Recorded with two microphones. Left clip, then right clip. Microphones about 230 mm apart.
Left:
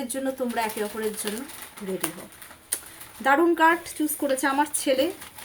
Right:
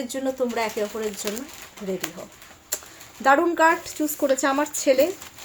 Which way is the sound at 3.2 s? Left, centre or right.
Centre.